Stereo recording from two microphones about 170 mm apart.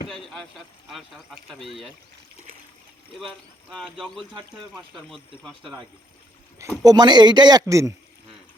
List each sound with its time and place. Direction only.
0.1 s a sound: centre (ahead or behind)
0.9 s speech: centre (ahead or behind)
3.2 s speech: centre (ahead or behind)
4.9 s speech: centre (ahead or behind)
6.8 s a man's voice: 25° right (ahead or behind)